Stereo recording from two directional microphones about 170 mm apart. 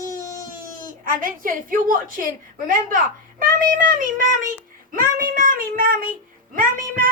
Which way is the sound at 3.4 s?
55° right (ahead or behind).